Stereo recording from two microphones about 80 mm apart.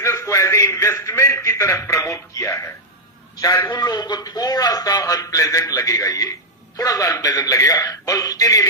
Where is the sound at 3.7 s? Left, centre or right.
Left.